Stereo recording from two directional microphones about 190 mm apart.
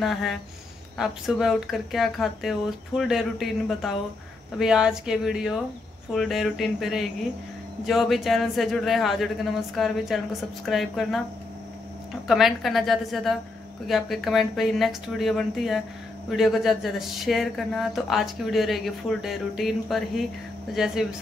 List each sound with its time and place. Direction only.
0.0 s speech: centre (ahead or behind)
12.3 s speech: centre (ahead or behind)